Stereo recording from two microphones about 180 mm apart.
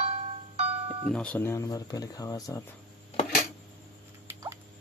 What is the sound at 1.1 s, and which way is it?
Speech, 5° left (ahead or behind).